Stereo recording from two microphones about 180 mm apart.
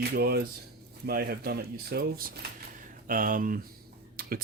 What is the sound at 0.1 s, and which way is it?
Speech, 60° right (ahead or behind).